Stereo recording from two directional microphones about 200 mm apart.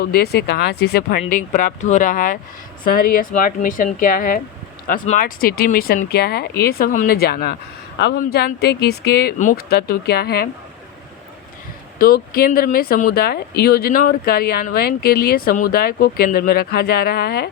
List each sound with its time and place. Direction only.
0.0 s speech: 50° left (ahead or behind)
1.3 s speech: 40° left (ahead or behind); by 8.2 s 60° left (ahead or behind)
8.2 s speech: 50° left (ahead or behind)
11.9 s speech: 45° left (ahead or behind)